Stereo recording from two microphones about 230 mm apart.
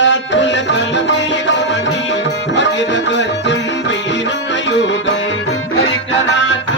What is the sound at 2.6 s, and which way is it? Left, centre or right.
Music, left.